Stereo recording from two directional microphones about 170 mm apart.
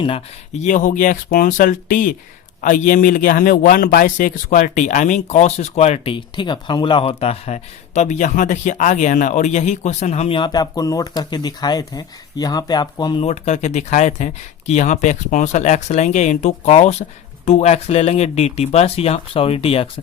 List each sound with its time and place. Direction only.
0.0 s a man's voice: 35° left (ahead or behind)
6.1 s speech: 30° left (ahead or behind)
13.2 s speech: 40° left (ahead or behind)